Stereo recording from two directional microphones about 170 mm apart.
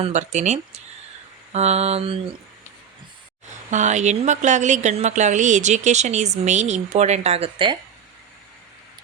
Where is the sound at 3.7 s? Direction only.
45° right (ahead or behind).